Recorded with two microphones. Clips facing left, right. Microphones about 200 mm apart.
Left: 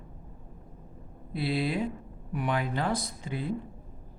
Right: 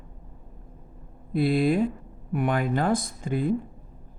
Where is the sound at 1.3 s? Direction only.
50° right (ahead or behind).